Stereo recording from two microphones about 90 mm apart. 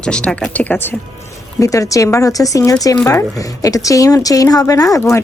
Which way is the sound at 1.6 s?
35° left (ahead or behind).